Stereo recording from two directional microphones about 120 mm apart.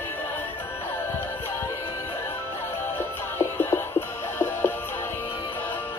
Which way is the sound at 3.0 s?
20° left (ahead or behind).